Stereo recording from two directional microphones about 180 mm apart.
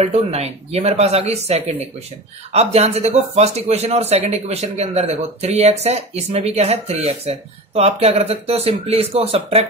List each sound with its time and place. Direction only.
0.0 s speech: 35° right (ahead or behind)